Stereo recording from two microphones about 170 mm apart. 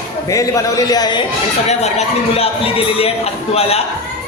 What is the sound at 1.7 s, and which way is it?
A man's voice, 40° left (ahead or behind).